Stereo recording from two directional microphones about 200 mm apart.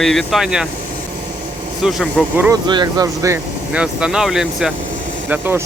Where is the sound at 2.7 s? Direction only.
20° right (ahead or behind).